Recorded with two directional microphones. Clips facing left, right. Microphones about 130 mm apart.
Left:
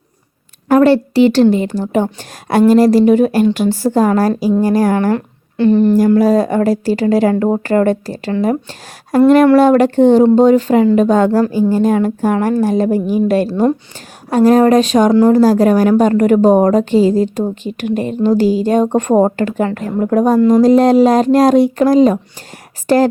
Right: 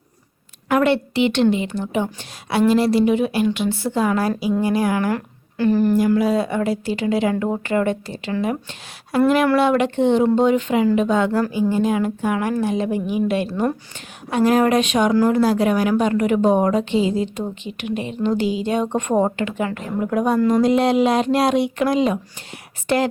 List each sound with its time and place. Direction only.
0.7 s speech: 35° left (ahead or behind)
5.1 s a sound: 25° left (ahead or behind)
6.1 s a woman's voice: 40° left (ahead or behind)
15.4 s speech: 40° left (ahead or behind)